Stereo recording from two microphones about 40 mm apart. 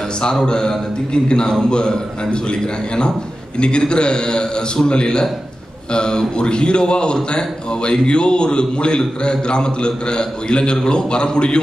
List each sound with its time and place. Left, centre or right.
0.2 s a man's voice: centre
3.5 s a man's voice: left